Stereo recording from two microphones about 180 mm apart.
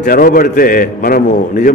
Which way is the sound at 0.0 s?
50° left (ahead or behind).